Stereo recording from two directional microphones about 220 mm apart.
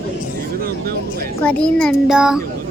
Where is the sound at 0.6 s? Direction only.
45° right (ahead or behind).